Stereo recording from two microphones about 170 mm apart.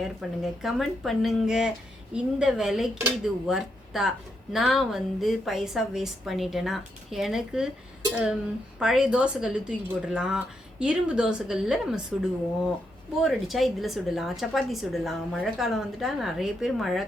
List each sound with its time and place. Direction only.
0.0 s a woman's voice: centre (ahead or behind)